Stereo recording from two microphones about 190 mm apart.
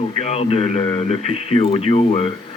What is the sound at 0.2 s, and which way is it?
Speech, 35° left (ahead or behind).